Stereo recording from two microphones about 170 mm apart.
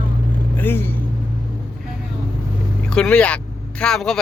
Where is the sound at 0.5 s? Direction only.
10° left (ahead or behind).